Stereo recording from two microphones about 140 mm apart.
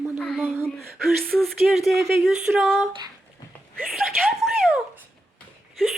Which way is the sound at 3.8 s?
Centre (ahead or behind).